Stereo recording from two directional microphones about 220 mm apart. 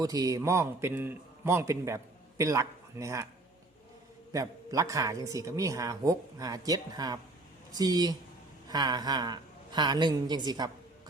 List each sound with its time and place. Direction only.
0.0 s a man's voice: 15° right (ahead or behind)
4.3 s a man's voice: 15° right (ahead or behind)